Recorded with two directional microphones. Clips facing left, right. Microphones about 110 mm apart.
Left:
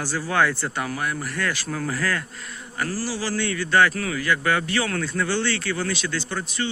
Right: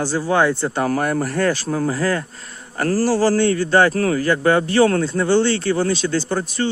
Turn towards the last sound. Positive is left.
turn(degrees=-35)  # may be behind; listen again after turning